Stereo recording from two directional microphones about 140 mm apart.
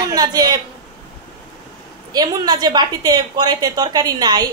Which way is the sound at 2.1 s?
30° right (ahead or behind).